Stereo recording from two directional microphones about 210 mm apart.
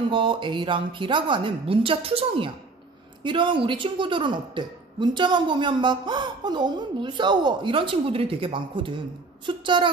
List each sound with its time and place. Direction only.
0.1 s a woman's voice: 25° right (ahead or behind)